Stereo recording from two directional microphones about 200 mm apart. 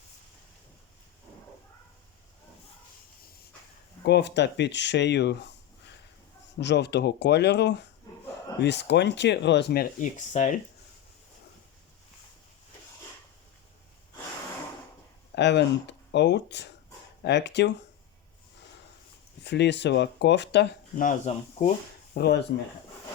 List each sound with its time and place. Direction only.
4.0 s speech: 55° left (ahead or behind)
6.6 s speech: 60° left (ahead or behind); by 10.6 s 35° left (ahead or behind)
15.4 s speech: 60° left (ahead or behind)
19.4 s speech: 60° left (ahead or behind)
20.9 s speech: 40° left (ahead or behind)
22.1 s speech: 55° left (ahead or behind)